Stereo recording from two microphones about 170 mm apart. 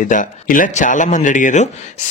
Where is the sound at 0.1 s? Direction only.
50° left (ahead or behind).